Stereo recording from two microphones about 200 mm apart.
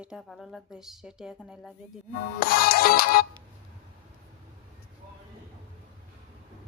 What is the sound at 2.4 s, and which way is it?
Music, 50° left (ahead or behind).